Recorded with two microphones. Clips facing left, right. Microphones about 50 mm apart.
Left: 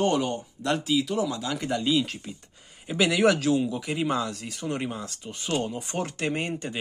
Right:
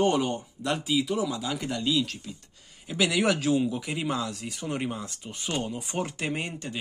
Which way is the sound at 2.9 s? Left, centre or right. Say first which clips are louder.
Left 3 dB; centre.